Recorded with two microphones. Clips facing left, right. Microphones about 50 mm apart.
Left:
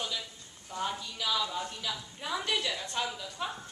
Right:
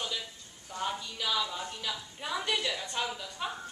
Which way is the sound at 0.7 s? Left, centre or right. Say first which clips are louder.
Even; centre.